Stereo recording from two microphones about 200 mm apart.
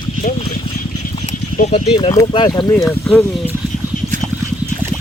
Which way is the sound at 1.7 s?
25° left (ahead or behind).